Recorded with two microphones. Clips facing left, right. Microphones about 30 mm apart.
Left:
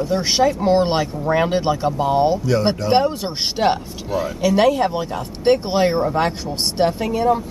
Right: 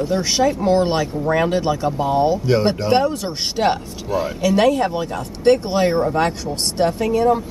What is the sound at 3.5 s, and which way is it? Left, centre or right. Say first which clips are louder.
Speech: even; centre.